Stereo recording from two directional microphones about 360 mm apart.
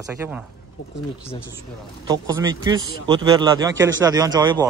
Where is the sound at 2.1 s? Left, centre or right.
Centre.